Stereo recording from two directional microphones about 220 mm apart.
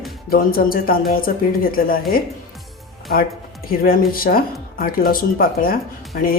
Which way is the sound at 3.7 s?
40° left (ahead or behind).